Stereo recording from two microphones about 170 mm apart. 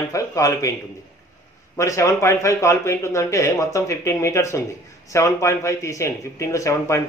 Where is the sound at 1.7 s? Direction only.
20° left (ahead or behind).